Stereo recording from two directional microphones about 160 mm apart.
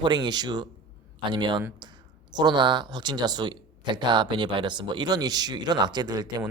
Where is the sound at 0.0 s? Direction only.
30° right (ahead or behind).